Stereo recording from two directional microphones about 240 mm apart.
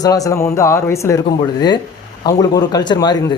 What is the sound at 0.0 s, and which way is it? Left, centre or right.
Speech, centre.